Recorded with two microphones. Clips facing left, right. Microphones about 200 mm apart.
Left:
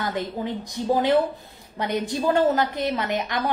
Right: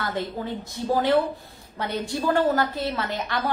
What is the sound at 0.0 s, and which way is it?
Speech, 15° left (ahead or behind).